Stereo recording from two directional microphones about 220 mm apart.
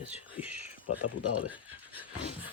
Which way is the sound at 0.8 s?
90° left.